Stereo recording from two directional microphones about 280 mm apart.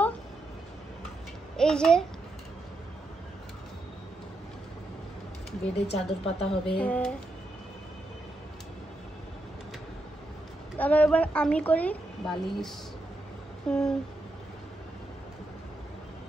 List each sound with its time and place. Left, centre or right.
1.6 s a woman's voice: centre
5.9 s a woman's voice: left
6.8 s a woman's voice: centre
10.8 s a woman's voice: centre